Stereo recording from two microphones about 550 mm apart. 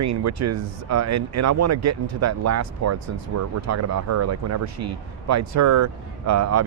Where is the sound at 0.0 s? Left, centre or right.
Right.